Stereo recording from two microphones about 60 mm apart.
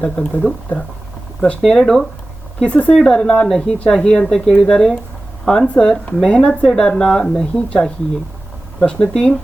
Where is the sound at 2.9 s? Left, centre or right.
Centre.